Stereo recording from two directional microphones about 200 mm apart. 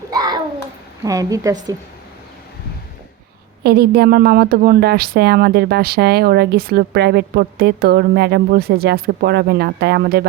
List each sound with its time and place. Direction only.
0.1 s a sound: 20° right (ahead or behind)
1.0 s a woman's voice: 15° right (ahead or behind)
3.6 s a woman's voice: 50° right (ahead or behind)